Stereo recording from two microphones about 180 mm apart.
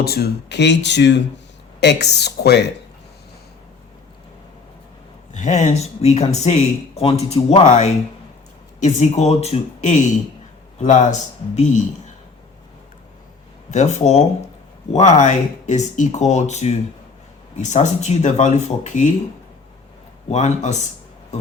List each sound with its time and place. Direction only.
0.0 s speech: 60° left (ahead or behind)
5.3 s speech: 40° left (ahead or behind)
13.7 s speech: 40° left (ahead or behind)
20.2 s speech: 40° left (ahead or behind)